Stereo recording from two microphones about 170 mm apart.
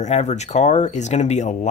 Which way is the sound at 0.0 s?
40° left (ahead or behind).